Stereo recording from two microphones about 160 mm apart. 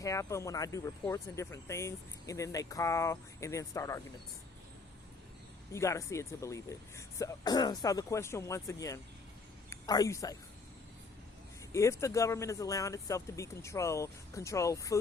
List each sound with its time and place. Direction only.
0.0 s speech: 20° left (ahead or behind)
5.7 s speech: 20° left (ahead or behind)
11.7 s speech: 20° left (ahead or behind)